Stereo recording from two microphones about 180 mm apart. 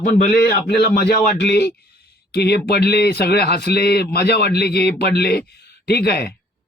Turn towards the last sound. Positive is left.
turn(degrees=65)  # may be behind; listen again after turning